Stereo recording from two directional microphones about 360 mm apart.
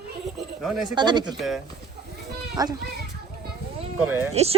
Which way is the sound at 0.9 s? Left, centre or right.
Centre.